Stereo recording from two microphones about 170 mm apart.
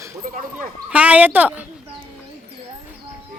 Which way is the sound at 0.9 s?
10° right (ahead or behind).